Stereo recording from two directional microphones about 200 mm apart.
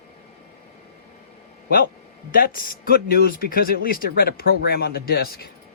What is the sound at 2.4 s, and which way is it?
Speech, 45° left (ahead or behind).